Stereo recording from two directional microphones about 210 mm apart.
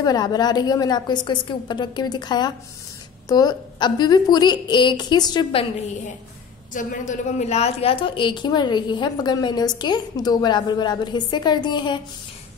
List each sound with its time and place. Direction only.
0.0 s a woman's voice: 20° left (ahead or behind)
6.7 s a woman's voice: 40° left (ahead or behind); by 12.0 s 20° left (ahead or behind)